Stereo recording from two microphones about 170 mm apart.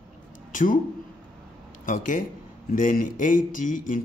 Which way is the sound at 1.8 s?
50° left (ahead or behind).